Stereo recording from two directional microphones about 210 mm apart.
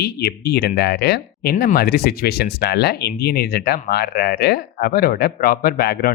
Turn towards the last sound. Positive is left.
turn(degrees=50)  # may be behind; listen again after turning